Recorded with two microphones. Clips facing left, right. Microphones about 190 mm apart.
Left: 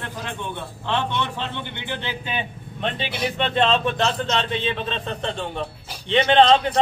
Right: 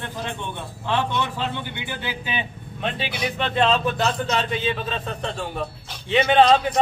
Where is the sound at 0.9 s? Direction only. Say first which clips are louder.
Right 1 dB; 10° right (ahead or behind).